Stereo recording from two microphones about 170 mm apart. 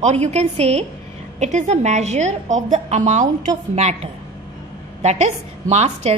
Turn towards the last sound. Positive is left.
turn(degrees=-40)  # may be behind; listen again after turning